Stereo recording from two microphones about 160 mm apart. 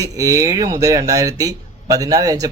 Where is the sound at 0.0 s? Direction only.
20° right (ahead or behind).